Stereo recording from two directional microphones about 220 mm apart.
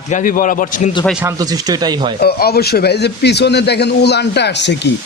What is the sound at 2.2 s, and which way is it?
Speech, 45° left (ahead or behind).